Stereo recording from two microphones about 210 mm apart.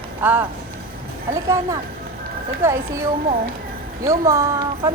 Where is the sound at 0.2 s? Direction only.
10° right (ahead or behind).